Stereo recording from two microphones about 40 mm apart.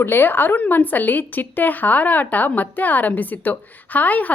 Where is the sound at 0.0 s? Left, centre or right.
Left.